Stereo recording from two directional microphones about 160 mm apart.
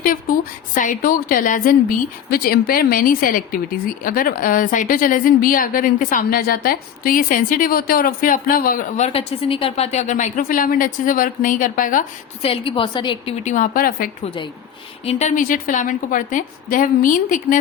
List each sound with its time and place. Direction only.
0.0 s a woman's voice: 60° left (ahead or behind)
9.0 s a woman's voice: 40° left (ahead or behind); by 12.0 s 55° left (ahead or behind)
12.4 s a woman's voice: 35° left (ahead or behind)
13.4 s a woman's voice: 50° left (ahead or behind)
14.3 s a woman's voice: 30° left (ahead or behind)
15.0 s a woman's voice: 50° left (ahead or behind)